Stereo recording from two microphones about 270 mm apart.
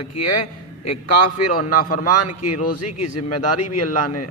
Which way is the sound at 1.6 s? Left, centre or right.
Left.